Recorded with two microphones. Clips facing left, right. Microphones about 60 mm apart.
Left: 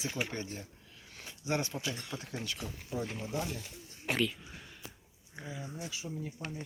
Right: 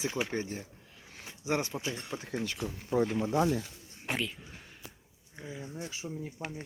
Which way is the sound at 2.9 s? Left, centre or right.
Right.